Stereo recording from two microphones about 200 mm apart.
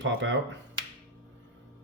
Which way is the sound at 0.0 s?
65° right (ahead or behind).